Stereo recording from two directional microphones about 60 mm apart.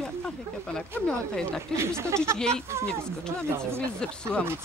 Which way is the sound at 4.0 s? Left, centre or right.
Centre.